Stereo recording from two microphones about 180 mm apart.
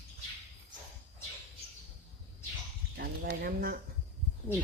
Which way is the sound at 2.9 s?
65° right (ahead or behind).